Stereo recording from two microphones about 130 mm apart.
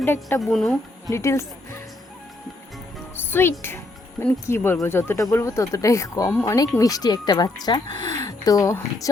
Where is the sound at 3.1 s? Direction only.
15° left (ahead or behind).